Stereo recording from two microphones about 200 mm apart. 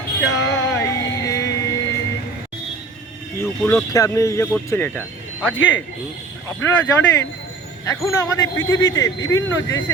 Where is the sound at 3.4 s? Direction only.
15° left (ahead or behind).